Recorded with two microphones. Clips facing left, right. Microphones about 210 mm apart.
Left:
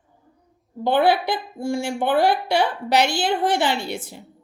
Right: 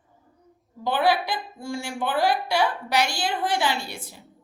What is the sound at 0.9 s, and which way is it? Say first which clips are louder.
A woman's voice: left 4 dB; 60° left (ahead or behind).